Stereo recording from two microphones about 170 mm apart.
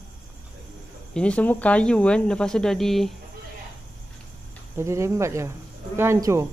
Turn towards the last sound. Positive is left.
turn(degrees=-15)  # may be behind; listen again after turning